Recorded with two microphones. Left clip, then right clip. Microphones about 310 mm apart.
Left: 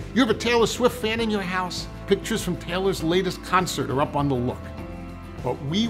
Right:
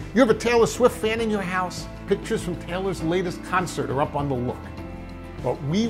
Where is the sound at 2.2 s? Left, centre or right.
Right.